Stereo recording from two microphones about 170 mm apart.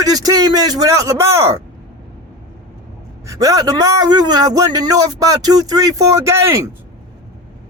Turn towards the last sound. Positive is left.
turn(degrees=-15)  # may be behind; listen again after turning